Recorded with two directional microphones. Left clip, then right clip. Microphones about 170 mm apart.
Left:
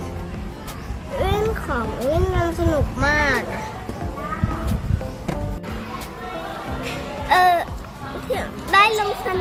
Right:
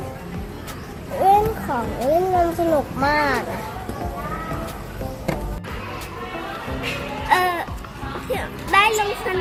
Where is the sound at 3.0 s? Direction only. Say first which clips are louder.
Left 2 dB; 30° left (ahead or behind).